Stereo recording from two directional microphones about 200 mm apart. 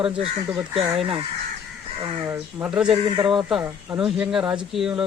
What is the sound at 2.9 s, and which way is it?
Speech, 25° right (ahead or behind).